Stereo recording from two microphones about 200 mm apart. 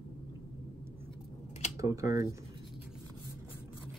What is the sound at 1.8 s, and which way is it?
Speech, 15° right (ahead or behind).